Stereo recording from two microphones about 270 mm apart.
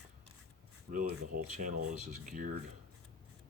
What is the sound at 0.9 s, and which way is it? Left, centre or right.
Speech, right.